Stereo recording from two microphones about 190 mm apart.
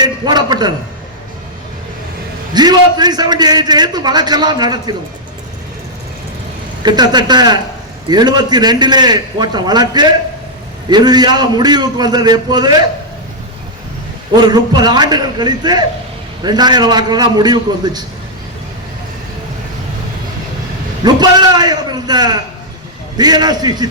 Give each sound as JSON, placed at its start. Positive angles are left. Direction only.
{"t": 0.0, "sound": "a man's voice", "side_deg": -20}
{"t": 2.5, "sound": "a man's voice", "side_deg": -20}
{"t": 6.8, "sound": "a man's voice", "side_deg": -20}
{"t": 14.4, "sound": "a man's voice", "side_deg": -20}
{"t": 21.0, "sound": "a man's voice", "side_deg": -20}